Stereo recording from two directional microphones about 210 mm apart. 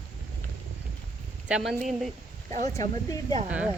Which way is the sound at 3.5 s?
5° right (ahead or behind).